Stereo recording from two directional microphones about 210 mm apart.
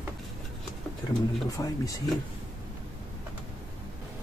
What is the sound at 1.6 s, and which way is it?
Speech, 20° left (ahead or behind).